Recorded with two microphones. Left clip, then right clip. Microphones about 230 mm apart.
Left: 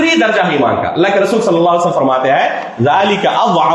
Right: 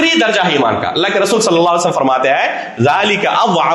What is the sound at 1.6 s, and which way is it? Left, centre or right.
A man's voice, right.